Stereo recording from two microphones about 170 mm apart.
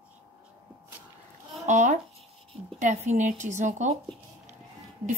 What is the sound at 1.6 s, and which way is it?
Speech, 45° right (ahead or behind).